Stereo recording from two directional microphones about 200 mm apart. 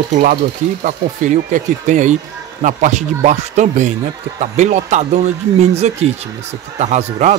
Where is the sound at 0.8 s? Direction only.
40° right (ahead or behind).